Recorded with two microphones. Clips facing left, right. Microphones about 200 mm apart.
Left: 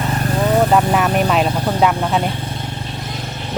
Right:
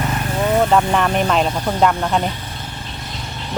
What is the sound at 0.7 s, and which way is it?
Speech, 5° left (ahead or behind).